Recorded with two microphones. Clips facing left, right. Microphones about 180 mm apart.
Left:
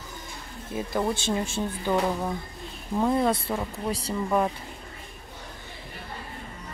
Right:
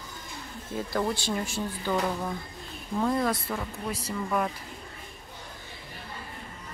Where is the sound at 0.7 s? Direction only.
20° left (ahead or behind).